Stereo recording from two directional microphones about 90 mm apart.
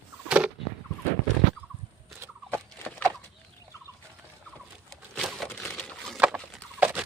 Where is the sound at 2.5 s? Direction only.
15° left (ahead or behind).